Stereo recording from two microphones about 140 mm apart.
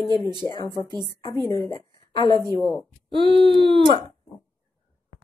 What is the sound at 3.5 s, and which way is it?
Speech, 40° right (ahead or behind).